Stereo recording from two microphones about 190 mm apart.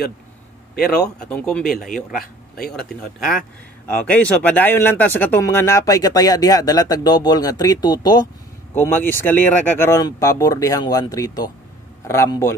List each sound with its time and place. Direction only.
1.2 s speech: 5° left (ahead or behind)